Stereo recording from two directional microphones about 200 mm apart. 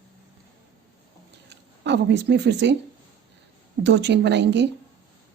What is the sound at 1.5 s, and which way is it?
Speech, 60° right (ahead or behind).